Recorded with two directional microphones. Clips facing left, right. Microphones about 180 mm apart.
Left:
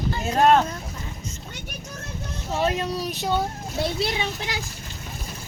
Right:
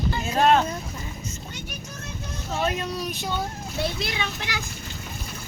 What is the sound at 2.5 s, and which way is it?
Speech, 30° left (ahead or behind).